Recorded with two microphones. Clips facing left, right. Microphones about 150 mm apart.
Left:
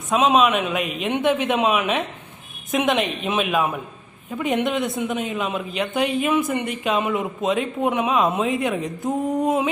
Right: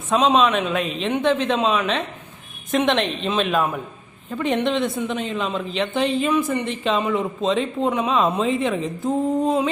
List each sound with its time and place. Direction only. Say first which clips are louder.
0.1 s speech: even; 10° left (ahead or behind)
9.0 s speech: right 1 dB; 15° left (ahead or behind)